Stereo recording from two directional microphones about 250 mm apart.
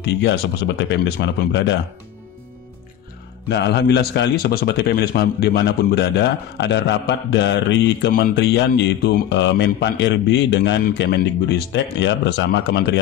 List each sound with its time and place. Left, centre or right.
0.0 s a man's voice: left
3.4 s a man's voice: left